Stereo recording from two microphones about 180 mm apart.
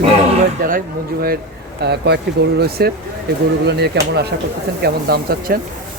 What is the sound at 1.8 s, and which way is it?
Speech, 65° right (ahead or behind).